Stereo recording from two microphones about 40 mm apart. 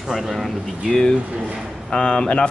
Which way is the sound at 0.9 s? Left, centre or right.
Centre.